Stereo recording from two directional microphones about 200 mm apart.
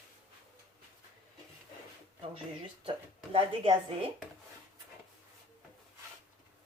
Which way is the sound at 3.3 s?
25° right (ahead or behind).